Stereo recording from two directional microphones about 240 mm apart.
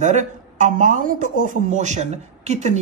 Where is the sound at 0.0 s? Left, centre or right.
Right.